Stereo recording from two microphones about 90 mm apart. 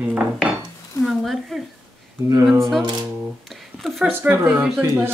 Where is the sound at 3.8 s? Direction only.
Centre (ahead or behind).